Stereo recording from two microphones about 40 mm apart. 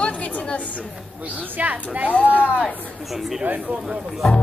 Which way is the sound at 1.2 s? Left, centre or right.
Right.